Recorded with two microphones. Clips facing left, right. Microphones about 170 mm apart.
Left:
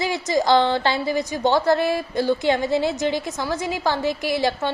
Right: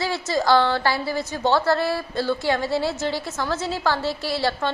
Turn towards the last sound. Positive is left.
turn(degrees=15)  # may be behind; listen again after turning